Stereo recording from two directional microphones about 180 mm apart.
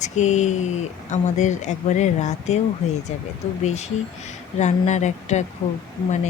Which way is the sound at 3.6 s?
40° left (ahead or behind).